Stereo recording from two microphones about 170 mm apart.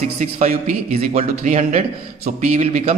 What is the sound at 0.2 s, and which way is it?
A man's voice, 50° right (ahead or behind).